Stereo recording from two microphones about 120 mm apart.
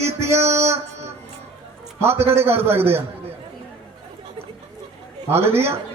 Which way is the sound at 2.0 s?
20° right (ahead or behind).